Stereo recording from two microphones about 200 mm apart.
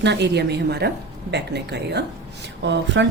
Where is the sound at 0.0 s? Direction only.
60° right (ahead or behind).